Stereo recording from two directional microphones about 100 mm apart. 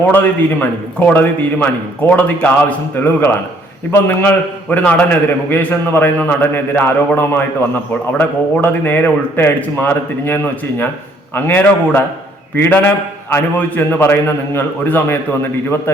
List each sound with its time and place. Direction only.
0.0 s a man's voice: 20° left (ahead or behind)